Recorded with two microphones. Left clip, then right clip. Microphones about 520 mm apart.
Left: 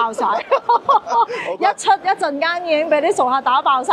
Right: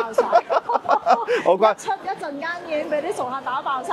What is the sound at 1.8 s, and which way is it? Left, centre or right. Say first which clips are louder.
A woman's voice: left 10 dB; left.